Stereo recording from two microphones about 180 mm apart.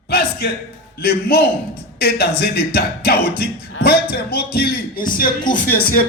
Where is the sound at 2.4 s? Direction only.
60° left (ahead or behind).